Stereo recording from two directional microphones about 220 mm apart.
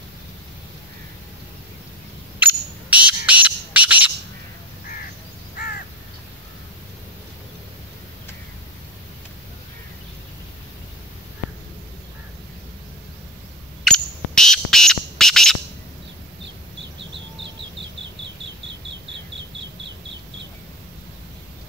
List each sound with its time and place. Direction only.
2.3 s smoke detector: 5° right (ahead or behind)
3.3 s music: 5° right (ahead or behind)
13.8 s bird: 5° left (ahead or behind)
18.4 s insect: 55° right (ahead or behind)